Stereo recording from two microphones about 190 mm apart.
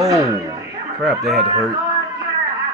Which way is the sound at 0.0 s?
15° right (ahead or behind).